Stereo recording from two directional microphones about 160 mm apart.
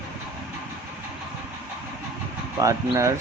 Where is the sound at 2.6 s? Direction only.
20° right (ahead or behind).